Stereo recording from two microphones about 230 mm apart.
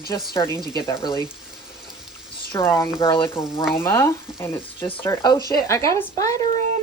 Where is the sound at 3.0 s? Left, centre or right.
Centre.